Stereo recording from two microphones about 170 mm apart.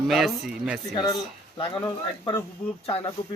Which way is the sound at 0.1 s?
Centre (ahead or behind).